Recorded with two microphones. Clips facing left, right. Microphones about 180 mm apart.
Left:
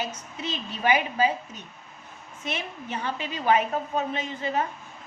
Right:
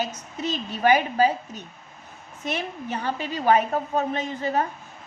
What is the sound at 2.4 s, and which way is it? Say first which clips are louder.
A woman's voice: right 4 dB; 40° right (ahead or behind).